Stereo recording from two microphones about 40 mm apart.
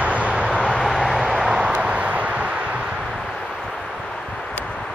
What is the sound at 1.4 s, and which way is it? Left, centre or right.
Vehicle, right.